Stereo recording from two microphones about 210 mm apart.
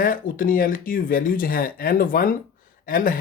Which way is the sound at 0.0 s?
40° left (ahead or behind).